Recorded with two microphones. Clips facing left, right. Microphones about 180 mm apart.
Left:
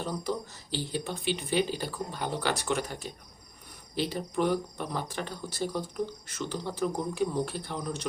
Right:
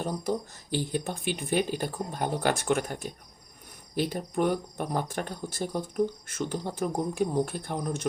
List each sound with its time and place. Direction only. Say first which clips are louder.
0.0 s speech: right 3 dB; 50° right (ahead or behind)